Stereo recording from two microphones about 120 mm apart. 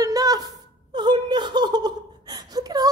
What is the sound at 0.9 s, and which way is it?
Speech, 40° right (ahead or behind).